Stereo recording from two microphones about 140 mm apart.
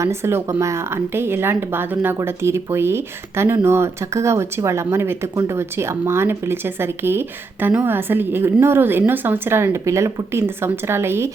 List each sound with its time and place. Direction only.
0.0 s speech: 20° right (ahead or behind)